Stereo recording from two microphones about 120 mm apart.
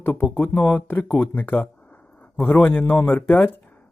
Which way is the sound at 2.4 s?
15° left (ahead or behind).